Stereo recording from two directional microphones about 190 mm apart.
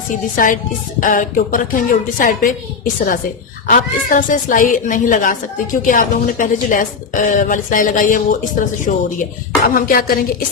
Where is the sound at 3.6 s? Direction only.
45° left (ahead or behind).